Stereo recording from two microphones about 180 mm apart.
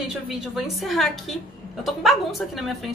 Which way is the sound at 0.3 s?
Centre (ahead or behind).